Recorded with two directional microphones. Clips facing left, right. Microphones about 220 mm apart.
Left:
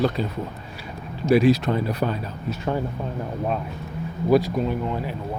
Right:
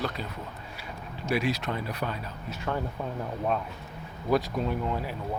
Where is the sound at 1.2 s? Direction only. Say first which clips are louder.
Left 11 dB; 35° left (ahead or behind).